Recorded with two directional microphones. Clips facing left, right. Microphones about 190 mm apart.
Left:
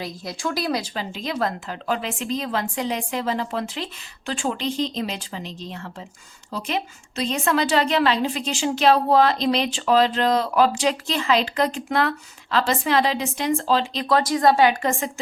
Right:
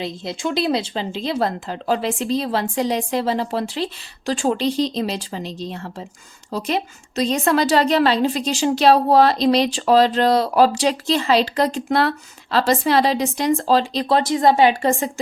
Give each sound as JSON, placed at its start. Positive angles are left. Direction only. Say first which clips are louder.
{"t": 0.0, "sound": "a woman's voice", "louder": "right 4 dB", "side_deg": -25}